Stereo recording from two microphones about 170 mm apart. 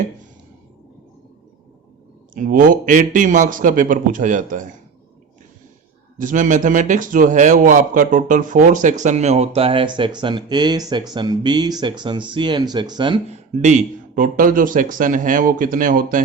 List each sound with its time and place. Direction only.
2.3 s speech: 50° right (ahead or behind)
6.1 s a man's voice: 50° right (ahead or behind); by 13.1 s 25° right (ahead or behind)
13.3 s speech: 45° right (ahead or behind)